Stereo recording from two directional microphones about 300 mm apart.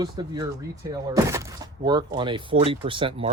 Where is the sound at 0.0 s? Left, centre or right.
Centre.